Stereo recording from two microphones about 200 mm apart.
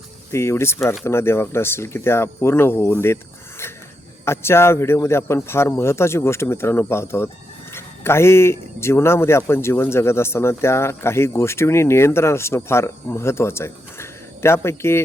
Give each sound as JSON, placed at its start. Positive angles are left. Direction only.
{"t": 0.3, "sound": "a man's voice", "side_deg": 15}
{"t": 4.3, "sound": "a man's voice", "side_deg": 10}